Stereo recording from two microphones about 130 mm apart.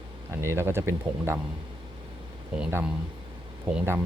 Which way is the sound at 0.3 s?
20° right (ahead or behind).